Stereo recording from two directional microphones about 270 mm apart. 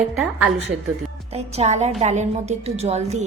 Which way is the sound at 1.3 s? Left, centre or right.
Right.